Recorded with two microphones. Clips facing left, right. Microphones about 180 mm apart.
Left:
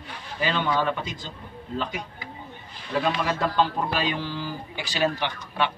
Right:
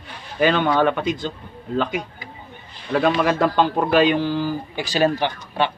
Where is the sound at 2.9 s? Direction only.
65° right (ahead or behind); by 5.7 s 35° right (ahead or behind).